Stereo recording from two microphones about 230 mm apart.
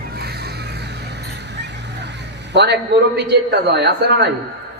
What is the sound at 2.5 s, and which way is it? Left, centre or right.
A man's voice, right.